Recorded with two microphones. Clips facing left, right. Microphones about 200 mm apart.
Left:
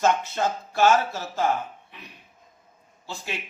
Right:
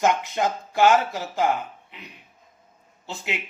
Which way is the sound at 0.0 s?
15° right (ahead or behind).